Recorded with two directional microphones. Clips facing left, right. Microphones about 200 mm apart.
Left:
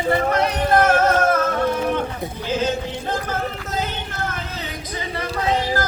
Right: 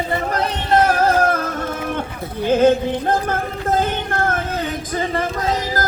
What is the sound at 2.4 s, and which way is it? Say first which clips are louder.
Music: right 9 dB; 55° right (ahead or behind).